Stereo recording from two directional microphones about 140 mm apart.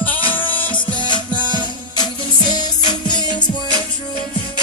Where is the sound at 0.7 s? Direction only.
35° left (ahead or behind).